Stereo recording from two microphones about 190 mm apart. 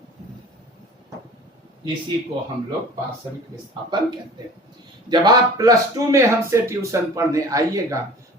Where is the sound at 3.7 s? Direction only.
25° right (ahead or behind).